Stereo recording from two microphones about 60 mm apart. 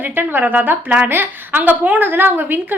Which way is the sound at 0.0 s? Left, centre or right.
Right.